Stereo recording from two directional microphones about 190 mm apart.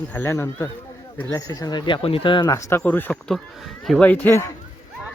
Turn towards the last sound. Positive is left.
turn(degrees=10)  # may be behind; listen again after turning